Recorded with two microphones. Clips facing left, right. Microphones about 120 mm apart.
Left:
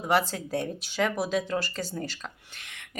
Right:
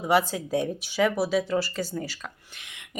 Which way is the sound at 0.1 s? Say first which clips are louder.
Right 3 dB; 10° right (ahead or behind).